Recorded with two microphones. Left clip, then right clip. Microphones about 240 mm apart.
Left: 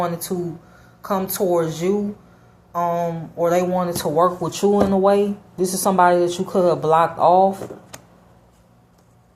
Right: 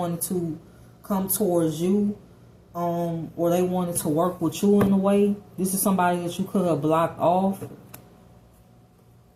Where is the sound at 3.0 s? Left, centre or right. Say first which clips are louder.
Left 5 dB; left.